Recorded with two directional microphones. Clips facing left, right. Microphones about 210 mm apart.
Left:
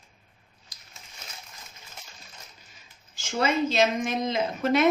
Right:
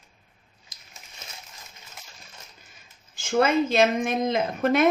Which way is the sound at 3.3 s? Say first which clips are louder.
Right 4 dB; 55° right (ahead or behind).